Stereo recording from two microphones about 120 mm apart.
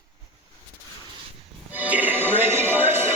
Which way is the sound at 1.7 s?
10° right (ahead or behind).